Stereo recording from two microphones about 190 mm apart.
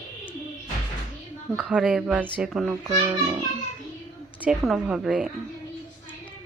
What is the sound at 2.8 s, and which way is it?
Speech, 15° right (ahead or behind).